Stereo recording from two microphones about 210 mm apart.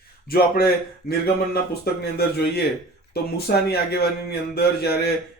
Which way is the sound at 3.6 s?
50° left (ahead or behind).